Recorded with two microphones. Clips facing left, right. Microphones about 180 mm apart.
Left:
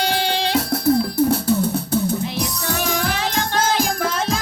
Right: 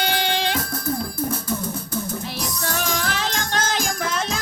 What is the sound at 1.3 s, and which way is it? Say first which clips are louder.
Music: left 8 dB; 65° left (ahead or behind).